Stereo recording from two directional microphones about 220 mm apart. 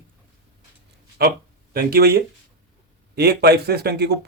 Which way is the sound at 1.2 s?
45° right (ahead or behind).